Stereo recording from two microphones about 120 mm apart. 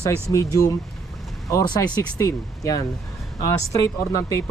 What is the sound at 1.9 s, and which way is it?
Speech, 30° left (ahead or behind).